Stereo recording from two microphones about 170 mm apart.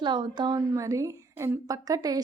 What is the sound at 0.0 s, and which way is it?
A woman's voice, 25° right (ahead or behind).